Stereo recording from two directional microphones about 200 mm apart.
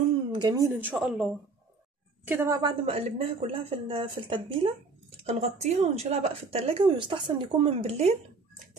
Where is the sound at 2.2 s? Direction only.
10° right (ahead or behind).